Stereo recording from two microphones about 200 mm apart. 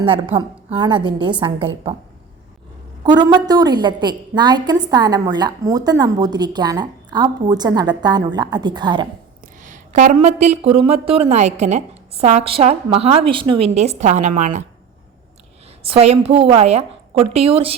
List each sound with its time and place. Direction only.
0.0 s a woman's voice: 25° right (ahead or behind)
3.0 s a woman's voice: 20° right (ahead or behind)
9.6 s a woman's voice: 40° right (ahead or behind)
15.8 s a woman's voice: 30° right (ahead or behind)